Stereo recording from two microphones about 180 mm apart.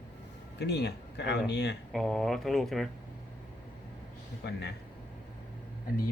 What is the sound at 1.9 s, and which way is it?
Speech, centre (ahead or behind).